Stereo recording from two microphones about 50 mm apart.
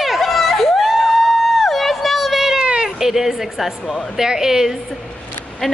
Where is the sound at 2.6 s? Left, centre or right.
Centre.